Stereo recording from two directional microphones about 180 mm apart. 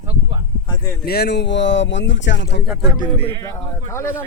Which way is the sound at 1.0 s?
60° left (ahead or behind).